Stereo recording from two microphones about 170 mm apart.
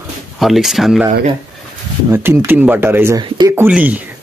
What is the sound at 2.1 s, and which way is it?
Speech, 15° right (ahead or behind).